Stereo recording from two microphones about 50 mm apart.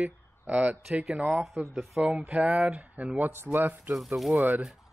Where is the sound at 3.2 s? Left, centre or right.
Right.